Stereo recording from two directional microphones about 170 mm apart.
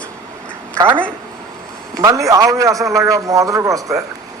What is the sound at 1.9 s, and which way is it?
A man's voice, 20° right (ahead or behind).